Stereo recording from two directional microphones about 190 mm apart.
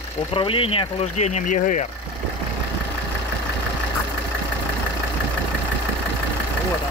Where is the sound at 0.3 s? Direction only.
30° left (ahead or behind).